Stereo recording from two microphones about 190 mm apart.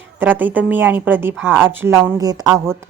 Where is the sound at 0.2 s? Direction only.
10° right (ahead or behind).